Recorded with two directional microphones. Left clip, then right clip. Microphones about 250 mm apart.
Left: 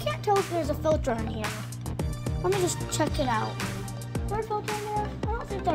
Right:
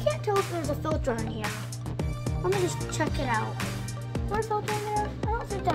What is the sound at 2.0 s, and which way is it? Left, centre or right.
Music, centre.